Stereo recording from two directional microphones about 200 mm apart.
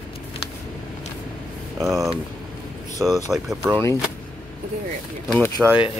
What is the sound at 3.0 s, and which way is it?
Speech, centre (ahead or behind).